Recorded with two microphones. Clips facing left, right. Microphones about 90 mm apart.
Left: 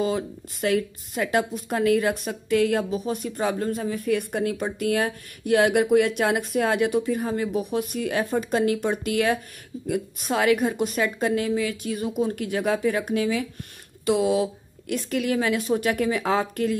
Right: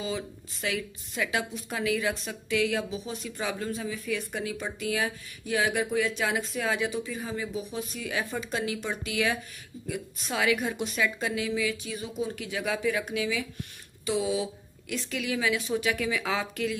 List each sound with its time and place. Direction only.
0.0 s speech: 50° left (ahead or behind)
14.0 s speech: 55° left (ahead or behind)